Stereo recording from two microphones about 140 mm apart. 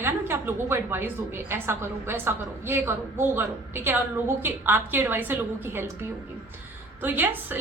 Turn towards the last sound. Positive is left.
turn(degrees=-15)  # may be behind; listen again after turning